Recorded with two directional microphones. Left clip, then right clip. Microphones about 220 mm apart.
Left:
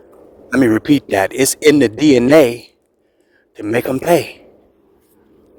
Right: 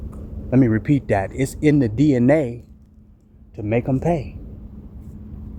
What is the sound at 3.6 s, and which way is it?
Speech, 45° left (ahead or behind).